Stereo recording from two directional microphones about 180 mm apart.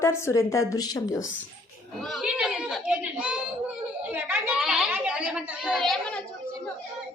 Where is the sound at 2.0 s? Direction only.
Centre (ahead or behind).